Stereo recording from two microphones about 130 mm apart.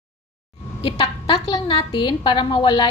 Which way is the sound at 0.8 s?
45° left (ahead or behind).